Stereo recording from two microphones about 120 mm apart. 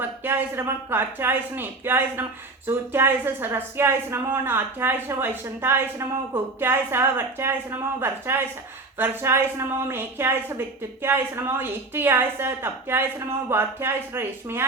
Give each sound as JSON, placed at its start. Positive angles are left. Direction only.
{"t": 0.0, "sound": "speech", "side_deg": -20}